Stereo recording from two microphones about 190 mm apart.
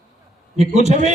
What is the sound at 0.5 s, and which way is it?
Speech, 35° right (ahead or behind).